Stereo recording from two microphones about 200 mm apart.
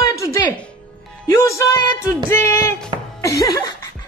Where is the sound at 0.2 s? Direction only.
15° left (ahead or behind).